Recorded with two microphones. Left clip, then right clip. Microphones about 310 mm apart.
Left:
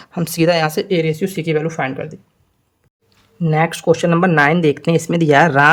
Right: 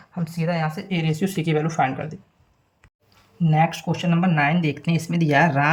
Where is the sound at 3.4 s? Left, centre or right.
Centre.